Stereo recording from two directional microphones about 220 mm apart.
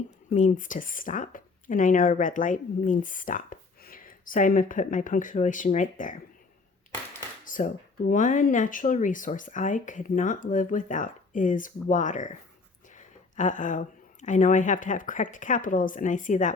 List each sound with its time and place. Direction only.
0.3 s speech: 35° left (ahead or behind)
7.4 s a woman's voice: 35° left (ahead or behind)